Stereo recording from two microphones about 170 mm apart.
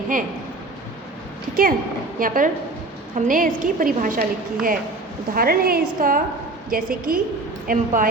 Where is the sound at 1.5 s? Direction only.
55° right (ahead or behind).